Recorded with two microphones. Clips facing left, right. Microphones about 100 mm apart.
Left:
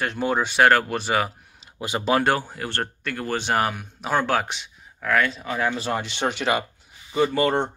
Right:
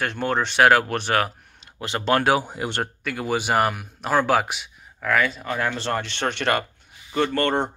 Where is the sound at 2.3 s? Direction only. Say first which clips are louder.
Right 3 dB; 20° right (ahead or behind).